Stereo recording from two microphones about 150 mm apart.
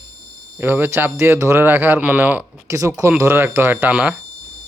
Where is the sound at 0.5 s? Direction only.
15° right (ahead or behind).